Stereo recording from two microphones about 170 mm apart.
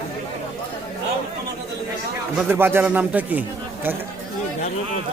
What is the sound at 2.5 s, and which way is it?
Speech, 15° right (ahead or behind).